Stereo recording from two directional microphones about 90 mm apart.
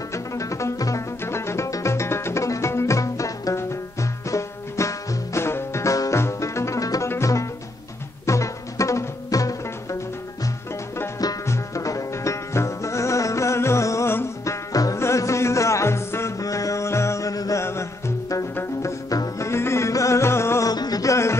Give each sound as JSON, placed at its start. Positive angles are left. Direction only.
{"t": 0.1, "sound": "music", "side_deg": 35}
{"t": 11.4, "sound": "music", "side_deg": 35}
{"t": 20.6, "sound": "a sound", "side_deg": 45}